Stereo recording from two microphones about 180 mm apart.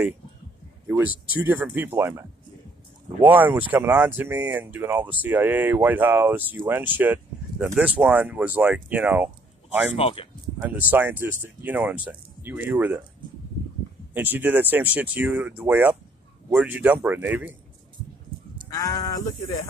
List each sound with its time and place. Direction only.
0.8 s speech: 10° right (ahead or behind)
9.9 s speech: 30° left (ahead or behind)
10.6 s speech: 10° right (ahead or behind)
14.1 s speech: 10° right (ahead or behind)
18.7 s speech: 20° left (ahead or behind)